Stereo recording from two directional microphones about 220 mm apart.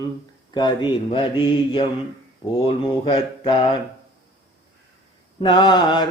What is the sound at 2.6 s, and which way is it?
Mantra, 25° left (ahead or behind).